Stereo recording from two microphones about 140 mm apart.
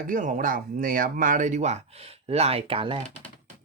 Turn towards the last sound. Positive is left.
turn(degrees=-40)  # may be behind; listen again after turning